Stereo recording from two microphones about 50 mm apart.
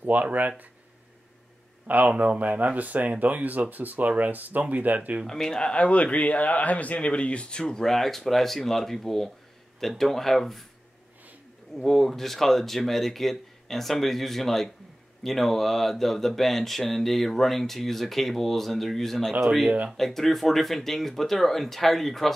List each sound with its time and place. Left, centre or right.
0.0 s speech: right
1.9 s speech: right
5.2 s speech: centre
11.7 s speech: centre